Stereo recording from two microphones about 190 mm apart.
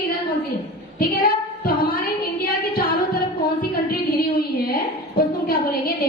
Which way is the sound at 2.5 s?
50° left (ahead or behind).